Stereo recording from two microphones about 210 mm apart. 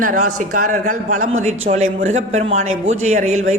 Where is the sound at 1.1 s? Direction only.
75° right (ahead or behind).